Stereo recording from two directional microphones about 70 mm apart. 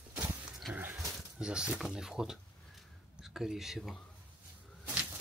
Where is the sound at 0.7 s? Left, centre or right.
Right.